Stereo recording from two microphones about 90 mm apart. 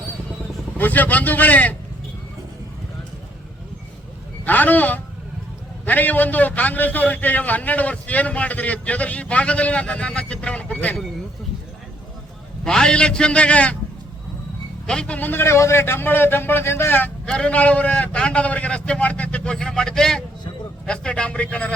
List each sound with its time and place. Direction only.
0.8 s a man's voice: 20° left (ahead or behind)
4.4 s a sound: 20° left (ahead or behind)
5.8 s a man's voice: 20° left (ahead or behind)
12.6 s a man's voice: 10° left (ahead or behind)
14.8 s a man's voice: 10° left (ahead or behind)
17.2 s a man's voice: 10° left (ahead or behind)